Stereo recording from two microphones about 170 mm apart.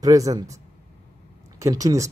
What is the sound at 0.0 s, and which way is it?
Speech, 20° right (ahead or behind).